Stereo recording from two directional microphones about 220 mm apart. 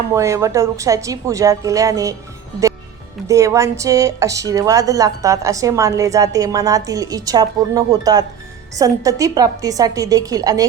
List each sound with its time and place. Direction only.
0.1 s speech: 15° right (ahead or behind)
3.2 s speech: 15° right (ahead or behind)